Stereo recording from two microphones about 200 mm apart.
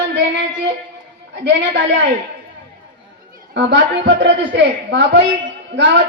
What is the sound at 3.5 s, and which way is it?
A woman's voice, 60° right (ahead or behind).